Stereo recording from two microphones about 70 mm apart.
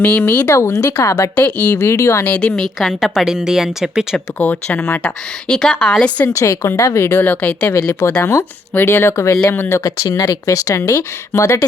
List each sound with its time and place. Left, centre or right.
0.0 s a woman's voice: left
0.4 s speech: left
1.4 s a woman's voice: left
1.8 s speech: left
2.2 s a woman's voice: centre
2.5 s a woman's voice: centre
4.4 s a woman's voice: left
6.3 s speech: left
7.8 s speech: left
8.2 s speech: left
9.8 s speech: left